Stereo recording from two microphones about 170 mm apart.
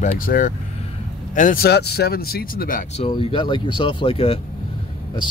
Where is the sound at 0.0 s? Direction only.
50° left (ahead or behind).